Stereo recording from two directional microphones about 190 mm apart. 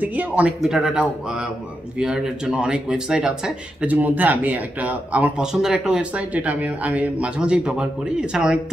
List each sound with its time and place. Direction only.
0.0 s speech: 10° right (ahead or behind)